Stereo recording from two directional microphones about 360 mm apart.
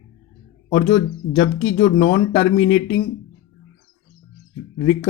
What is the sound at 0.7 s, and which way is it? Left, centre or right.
A man's voice, left.